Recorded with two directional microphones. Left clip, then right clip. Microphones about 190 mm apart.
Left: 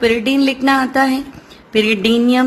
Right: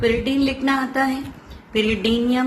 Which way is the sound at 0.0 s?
40° left (ahead or behind).